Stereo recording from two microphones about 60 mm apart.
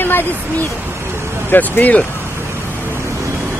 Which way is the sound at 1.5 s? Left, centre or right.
Left.